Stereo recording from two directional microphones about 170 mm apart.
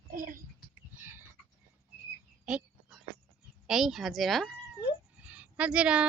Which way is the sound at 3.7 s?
Centre (ahead or behind).